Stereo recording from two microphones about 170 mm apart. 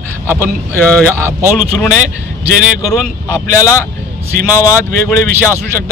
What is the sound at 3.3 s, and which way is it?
Speech, 15° left (ahead or behind).